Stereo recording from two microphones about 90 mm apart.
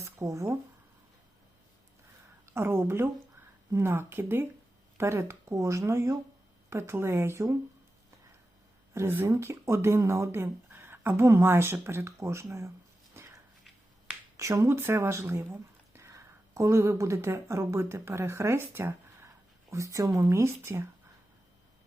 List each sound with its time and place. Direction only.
0.0 s speech: 35° right (ahead or behind)
2.5 s speech: 25° right (ahead or behind)
8.9 s speech: 25° right (ahead or behind)
13.2 s a sound: 25° right (ahead or behind)
14.3 s speech: 35° right (ahead or behind)
19.7 s speech: 35° right (ahead or behind)